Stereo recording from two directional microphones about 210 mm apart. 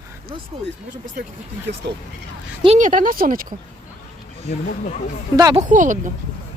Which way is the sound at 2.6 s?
35° right (ahead or behind).